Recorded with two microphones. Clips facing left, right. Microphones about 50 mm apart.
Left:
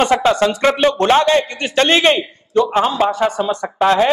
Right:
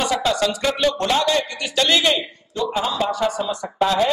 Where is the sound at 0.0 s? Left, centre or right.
Left.